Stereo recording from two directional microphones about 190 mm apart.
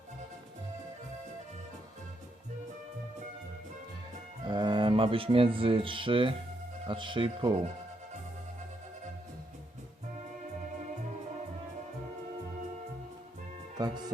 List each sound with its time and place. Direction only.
4.4 s speech: 25° right (ahead or behind)
13.7 s music: 20° right (ahead or behind)